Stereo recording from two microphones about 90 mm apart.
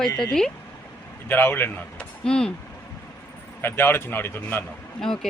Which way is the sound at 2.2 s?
10° left (ahead or behind).